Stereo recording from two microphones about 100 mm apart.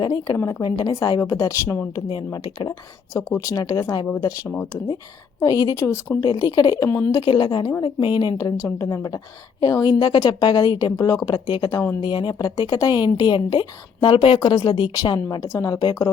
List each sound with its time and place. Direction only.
0.0 s a woman's voice: 45° left (ahead or behind); by 1.9 s 25° left (ahead or behind)
2.1 s speech: 45° left (ahead or behind)
3.1 s a woman's voice: 30° left (ahead or behind)
4.4 s speech: 20° left (ahead or behind)
5.4 s a woman's voice: 40° left (ahead or behind)
6.1 s a woman's voice: 40° left (ahead or behind)
7.3 s speech: 50° left (ahead or behind)
8.5 s a woman's voice: 30° left (ahead or behind)
11.4 s speech: 45° left (ahead or behind)
14.3 s speech: 45° left (ahead or behind)